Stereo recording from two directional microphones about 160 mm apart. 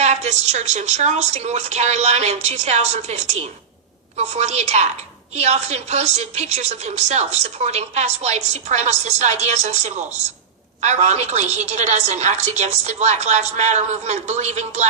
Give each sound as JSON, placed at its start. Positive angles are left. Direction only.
{"t": 0.0, "sound": "a woman's voice", "side_deg": -45}